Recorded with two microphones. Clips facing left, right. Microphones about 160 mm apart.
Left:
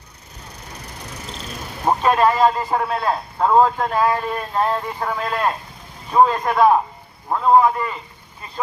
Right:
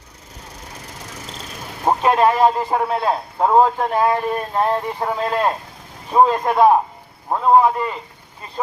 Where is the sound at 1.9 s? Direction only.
15° right (ahead or behind).